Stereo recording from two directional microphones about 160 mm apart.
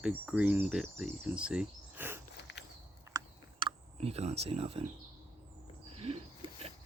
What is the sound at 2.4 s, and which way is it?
Walk, 90° left.